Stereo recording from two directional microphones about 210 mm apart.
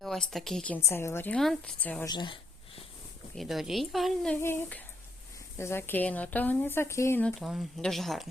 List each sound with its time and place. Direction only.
0.0 s a woman's voice: centre (ahead or behind)
0.9 s speech: 10° left (ahead or behind)
2.0 s a sound: 20° left (ahead or behind)
3.3 s speech: centre (ahead or behind)